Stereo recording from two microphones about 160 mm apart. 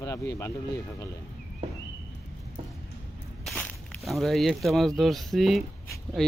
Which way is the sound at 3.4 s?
5° left (ahead or behind).